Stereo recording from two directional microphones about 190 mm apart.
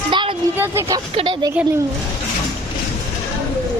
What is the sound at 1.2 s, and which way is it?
Speech, 25° right (ahead or behind).